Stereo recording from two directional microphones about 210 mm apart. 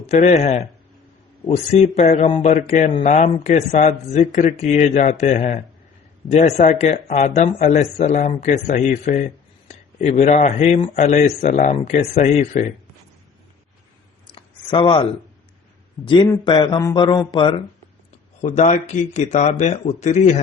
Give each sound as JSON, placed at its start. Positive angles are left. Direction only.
{"t": 0.0, "sound": "speech", "side_deg": 35}
{"t": 14.3, "sound": "a sound", "side_deg": 25}
{"t": 16.0, "sound": "speech", "side_deg": 20}
{"t": 18.4, "sound": "speech", "side_deg": 35}